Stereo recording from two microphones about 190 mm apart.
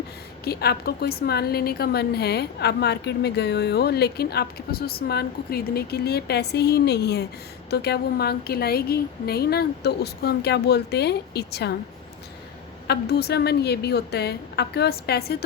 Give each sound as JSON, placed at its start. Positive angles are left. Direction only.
{"t": 0.4, "sound": "a woman's voice", "side_deg": 55}
{"t": 12.9, "sound": "a woman's voice", "side_deg": 60}